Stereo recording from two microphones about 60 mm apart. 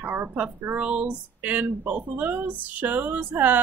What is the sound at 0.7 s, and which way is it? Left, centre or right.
Speech, right.